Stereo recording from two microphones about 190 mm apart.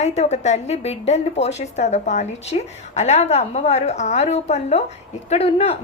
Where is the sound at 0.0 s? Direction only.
35° left (ahead or behind).